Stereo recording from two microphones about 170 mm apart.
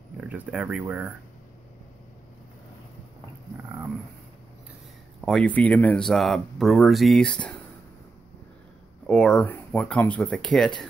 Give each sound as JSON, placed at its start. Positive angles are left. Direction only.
{"t": 0.2, "sound": "speech", "side_deg": -10}
{"t": 5.2, "sound": "speech", "side_deg": 5}
{"t": 9.0, "sound": "speech", "side_deg": 5}